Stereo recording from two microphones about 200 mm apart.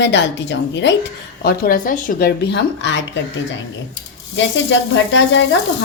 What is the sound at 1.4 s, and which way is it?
Speech, 50° left (ahead or behind).